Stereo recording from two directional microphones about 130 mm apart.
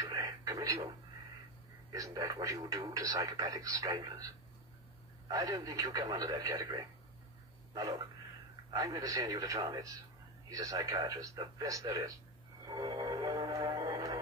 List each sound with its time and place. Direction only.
0.0 s radio: 25° right (ahead or behind)
1.9 s speech: 30° right (ahead or behind)
5.3 s speech: 25° right (ahead or behind)
7.7 s a sound: 30° right (ahead or behind)
8.6 s speech: 25° right (ahead or behind)
12.6 s music: 30° right (ahead or behind)